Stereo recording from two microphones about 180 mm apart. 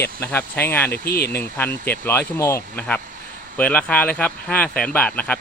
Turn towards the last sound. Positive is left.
turn(degrees=10)  # may be behind; listen again after turning